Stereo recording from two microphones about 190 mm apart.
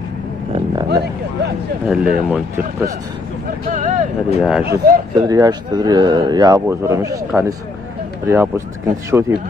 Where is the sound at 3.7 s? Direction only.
40° right (ahead or behind).